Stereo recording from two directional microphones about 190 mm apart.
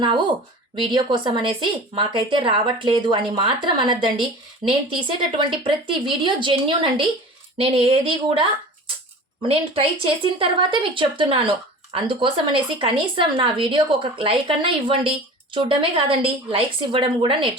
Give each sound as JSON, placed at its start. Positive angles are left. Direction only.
{"t": 0.0, "sound": "a woman's voice", "side_deg": -25}